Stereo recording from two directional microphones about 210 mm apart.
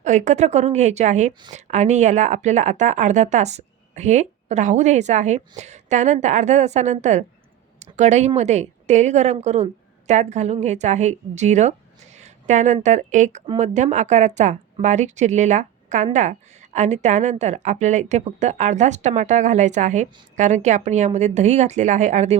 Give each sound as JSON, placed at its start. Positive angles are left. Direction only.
{"t": 0.0, "sound": "speech", "side_deg": -35}